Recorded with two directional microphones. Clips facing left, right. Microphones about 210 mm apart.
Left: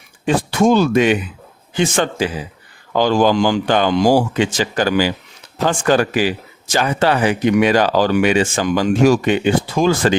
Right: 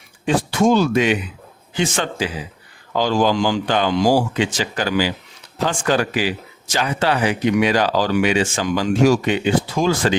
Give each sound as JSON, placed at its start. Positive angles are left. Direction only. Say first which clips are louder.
{"t": 0.3, "sound": "speech", "louder": "left 2 dB", "side_deg": 55}